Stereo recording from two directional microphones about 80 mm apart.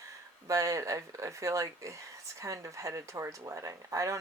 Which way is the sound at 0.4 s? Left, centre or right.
Right.